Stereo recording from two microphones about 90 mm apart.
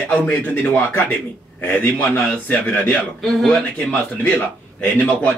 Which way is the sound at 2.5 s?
15° left (ahead or behind).